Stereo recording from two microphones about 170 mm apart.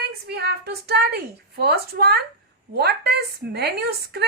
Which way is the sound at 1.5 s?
70° right (ahead or behind).